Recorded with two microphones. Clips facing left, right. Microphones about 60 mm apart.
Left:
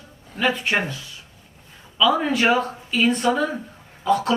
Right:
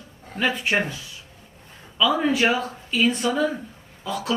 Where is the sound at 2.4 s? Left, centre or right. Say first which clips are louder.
Left 3 dB; left.